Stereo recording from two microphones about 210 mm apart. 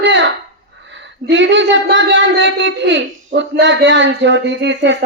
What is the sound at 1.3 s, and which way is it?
A child's voice, 60° right (ahead or behind).